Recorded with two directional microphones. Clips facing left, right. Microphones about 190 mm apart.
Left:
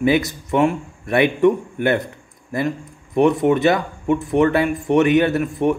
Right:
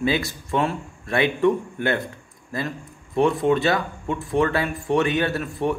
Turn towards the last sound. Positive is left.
turn(degrees=20)  # may be behind; listen again after turning